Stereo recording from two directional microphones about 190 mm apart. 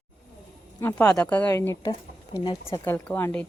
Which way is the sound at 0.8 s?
5° left (ahead or behind).